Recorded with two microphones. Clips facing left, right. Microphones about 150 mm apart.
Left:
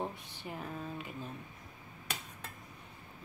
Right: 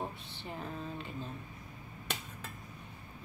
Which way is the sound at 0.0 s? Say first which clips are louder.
Left 1 dB; 10° left (ahead or behind).